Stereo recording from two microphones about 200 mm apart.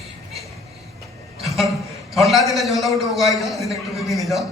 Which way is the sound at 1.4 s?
Centre (ahead or behind).